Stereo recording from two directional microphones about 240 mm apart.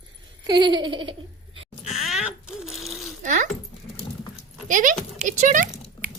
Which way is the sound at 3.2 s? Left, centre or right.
Right.